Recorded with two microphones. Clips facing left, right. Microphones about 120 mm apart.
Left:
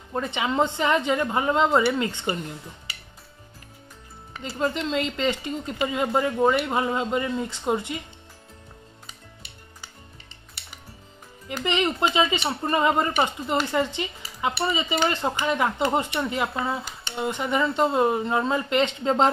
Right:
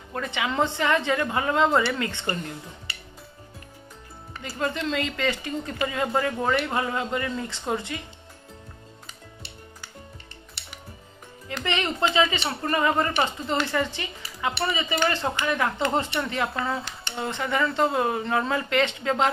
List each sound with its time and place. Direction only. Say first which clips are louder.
0.1 s speech: left 2 dB; 25° left (ahead or behind)
4.4 s speech: left 2 dB; 25° left (ahead or behind)
11.4 s speech: left 3 dB; 15° left (ahead or behind)